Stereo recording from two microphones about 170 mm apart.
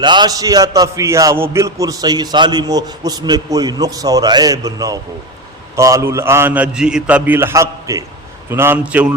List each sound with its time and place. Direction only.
0.0 s a man's voice: 25° right (ahead or behind); by 9.1 s 5° right (ahead or behind)